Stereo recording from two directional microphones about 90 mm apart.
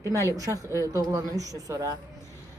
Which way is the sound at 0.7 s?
40° right (ahead or behind).